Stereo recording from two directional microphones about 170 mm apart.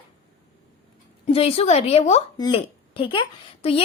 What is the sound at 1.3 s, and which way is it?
A woman's voice, 35° left (ahead or behind).